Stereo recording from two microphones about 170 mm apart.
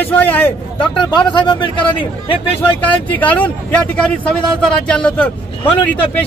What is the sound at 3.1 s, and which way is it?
A man's voice, 10° left (ahead or behind).